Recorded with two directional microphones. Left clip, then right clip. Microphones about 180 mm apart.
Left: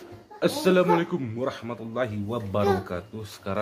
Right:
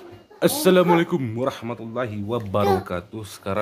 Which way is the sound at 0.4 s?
45° right (ahead or behind).